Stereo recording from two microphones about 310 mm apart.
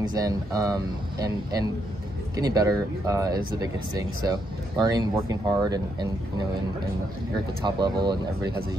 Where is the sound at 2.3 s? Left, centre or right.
Centre.